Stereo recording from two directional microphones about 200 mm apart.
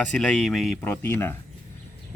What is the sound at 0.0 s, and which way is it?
Speech, 5° left (ahead or behind).